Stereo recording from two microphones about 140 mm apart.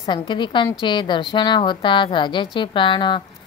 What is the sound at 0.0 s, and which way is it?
A woman's voice, 35° left (ahead or behind).